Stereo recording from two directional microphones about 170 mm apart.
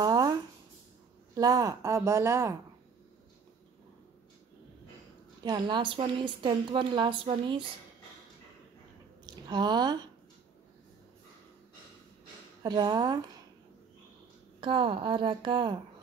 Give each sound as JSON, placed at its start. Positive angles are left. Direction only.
{"t": 0.0, "sound": "a sound", "side_deg": -20}
{"t": 1.3, "sound": "a woman's voice", "side_deg": -20}
{"t": 5.4, "sound": "a woman's voice", "side_deg": -25}
{"t": 9.2, "sound": "speech", "side_deg": -25}
{"t": 12.6, "sound": "a woman's voice", "side_deg": -25}
{"t": 14.6, "sound": "a woman's voice", "side_deg": -30}